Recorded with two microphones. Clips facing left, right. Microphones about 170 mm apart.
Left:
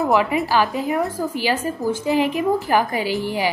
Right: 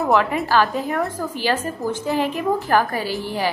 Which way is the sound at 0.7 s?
Centre (ahead or behind).